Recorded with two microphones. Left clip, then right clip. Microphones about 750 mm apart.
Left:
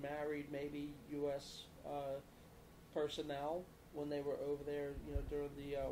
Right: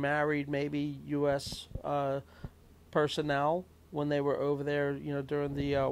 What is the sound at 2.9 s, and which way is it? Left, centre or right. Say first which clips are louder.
Speech: right 12 dB; right.